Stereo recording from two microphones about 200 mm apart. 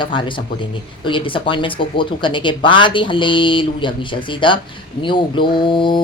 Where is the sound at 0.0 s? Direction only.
25° left (ahead or behind).